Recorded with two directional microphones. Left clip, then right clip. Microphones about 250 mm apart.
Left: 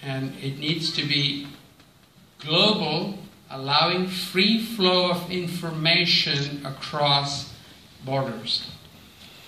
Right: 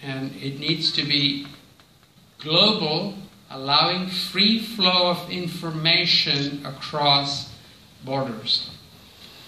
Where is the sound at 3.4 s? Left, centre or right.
Right.